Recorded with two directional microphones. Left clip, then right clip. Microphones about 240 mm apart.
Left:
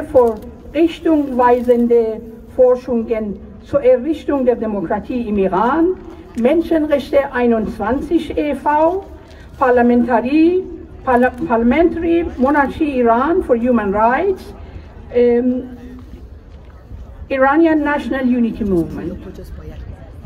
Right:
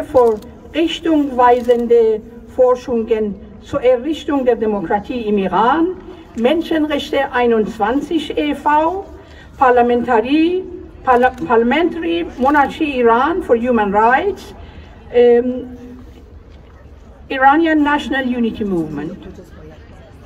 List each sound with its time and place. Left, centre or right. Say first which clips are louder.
0.7 s a woman's voice: left 1 dB; right
17.3 s a woman's voice: right 1 dB; right